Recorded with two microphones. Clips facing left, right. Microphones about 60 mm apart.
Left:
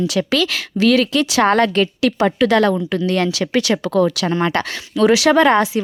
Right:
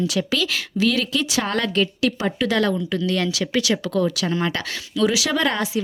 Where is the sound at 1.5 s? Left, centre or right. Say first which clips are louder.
Left 6 dB; left.